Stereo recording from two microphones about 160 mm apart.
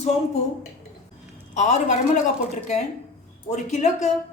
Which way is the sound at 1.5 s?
50° left (ahead or behind).